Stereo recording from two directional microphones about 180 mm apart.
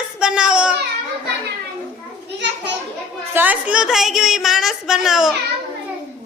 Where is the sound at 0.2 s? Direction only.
5° right (ahead or behind).